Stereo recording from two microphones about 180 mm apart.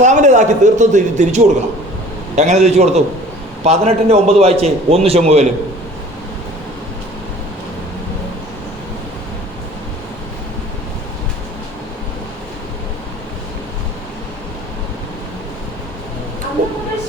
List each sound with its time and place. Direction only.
0.0 s a man's voice: 40° right (ahead or behind)